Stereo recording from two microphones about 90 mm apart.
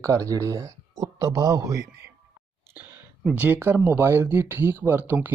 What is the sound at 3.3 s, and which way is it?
Speech, 20° right (ahead or behind).